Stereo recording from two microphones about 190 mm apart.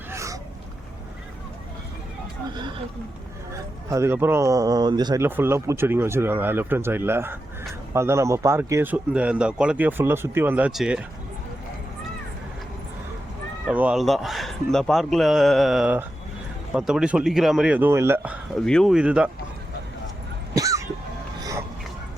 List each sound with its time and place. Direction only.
0.1 s a sound: 15° right (ahead or behind)
3.8 s speech: 15° right (ahead or behind)
13.7 s a man's voice: 5° right (ahead or behind)
18.6 s a man's voice: 5° left (ahead or behind)
20.6 s music: 15° right (ahead or behind)